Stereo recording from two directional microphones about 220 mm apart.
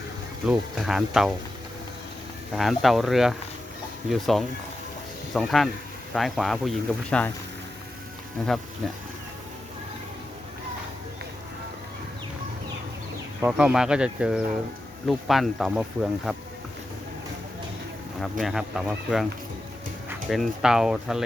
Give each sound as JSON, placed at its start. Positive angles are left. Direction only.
{"t": 0.4, "sound": "speech", "side_deg": 0}
{"t": 2.6, "sound": "speech", "side_deg": 0}
{"t": 13.4, "sound": "speech", "side_deg": -5}
{"t": 18.2, "sound": "speech", "side_deg": 0}